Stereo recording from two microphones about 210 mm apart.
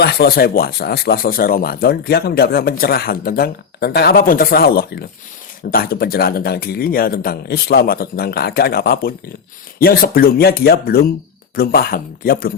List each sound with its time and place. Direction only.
0.0 s speech: 50° left (ahead or behind)